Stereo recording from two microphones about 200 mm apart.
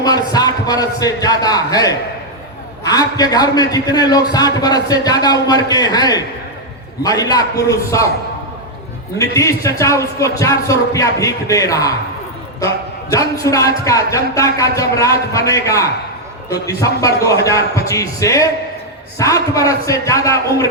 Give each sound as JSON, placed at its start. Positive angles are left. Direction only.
{"t": 0.0, "sound": "a man's voice", "side_deg": 20}
{"t": 9.1, "sound": "a man's voice", "side_deg": 15}